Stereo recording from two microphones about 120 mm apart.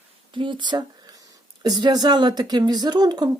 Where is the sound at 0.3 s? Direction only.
40° right (ahead or behind).